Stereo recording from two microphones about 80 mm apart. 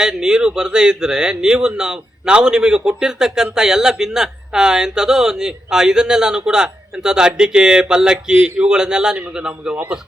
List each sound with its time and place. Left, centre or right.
0.0 s speech: centre